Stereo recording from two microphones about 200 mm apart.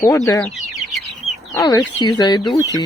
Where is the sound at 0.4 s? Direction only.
Centre (ahead or behind).